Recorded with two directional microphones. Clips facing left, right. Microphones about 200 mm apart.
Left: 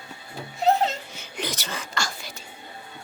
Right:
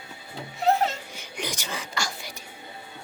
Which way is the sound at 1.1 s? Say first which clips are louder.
Left 2 dB; 15° right (ahead or behind).